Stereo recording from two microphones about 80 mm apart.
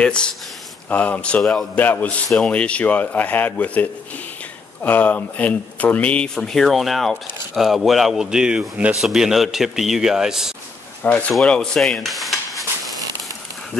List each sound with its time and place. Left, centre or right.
0.0 s speech: centre
2.2 s speech: centre
11.0 s speech: centre
11.3 s stir: centre